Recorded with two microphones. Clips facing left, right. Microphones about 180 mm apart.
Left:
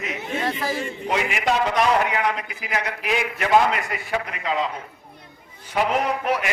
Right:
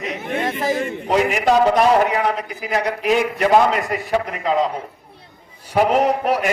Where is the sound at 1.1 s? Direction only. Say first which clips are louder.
Right 7 dB; 40° right (ahead or behind).